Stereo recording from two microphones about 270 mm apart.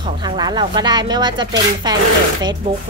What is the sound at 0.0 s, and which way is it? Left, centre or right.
Speech, centre.